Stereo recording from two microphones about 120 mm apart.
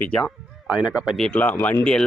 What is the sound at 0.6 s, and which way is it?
Speech, 10° right (ahead or behind).